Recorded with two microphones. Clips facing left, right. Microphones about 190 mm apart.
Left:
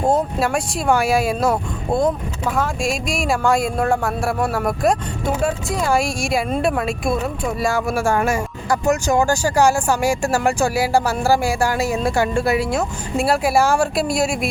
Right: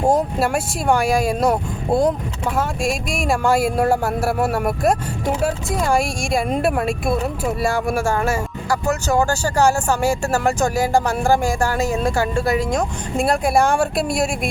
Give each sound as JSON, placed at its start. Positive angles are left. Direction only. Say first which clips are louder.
{"t": 0.0, "sound": "speech", "louder": "right 1 dB", "side_deg": -5}
{"t": 8.0, "sound": "speech", "louder": "left 1 dB", "side_deg": 15}